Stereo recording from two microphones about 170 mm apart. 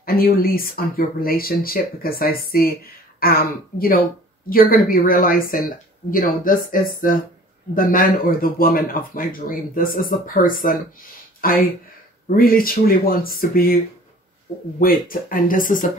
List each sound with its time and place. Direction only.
0.0 s speech: 60° left (ahead or behind)
14.8 s speech: 55° left (ahead or behind)